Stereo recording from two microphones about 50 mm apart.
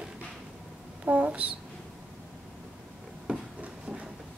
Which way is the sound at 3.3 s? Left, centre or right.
Right.